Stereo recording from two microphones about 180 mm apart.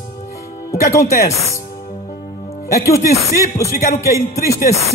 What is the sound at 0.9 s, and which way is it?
Music, 15° left (ahead or behind).